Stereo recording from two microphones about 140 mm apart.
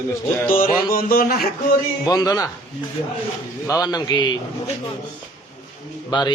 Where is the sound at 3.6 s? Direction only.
25° left (ahead or behind).